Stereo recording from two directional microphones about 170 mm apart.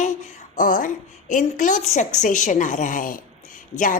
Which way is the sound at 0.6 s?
50° left (ahead or behind).